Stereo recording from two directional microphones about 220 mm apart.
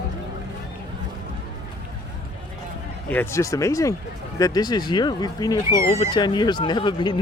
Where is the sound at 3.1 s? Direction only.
10° left (ahead or behind).